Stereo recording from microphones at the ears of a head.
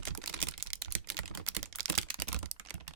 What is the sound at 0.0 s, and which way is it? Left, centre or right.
Computer keyboard, right.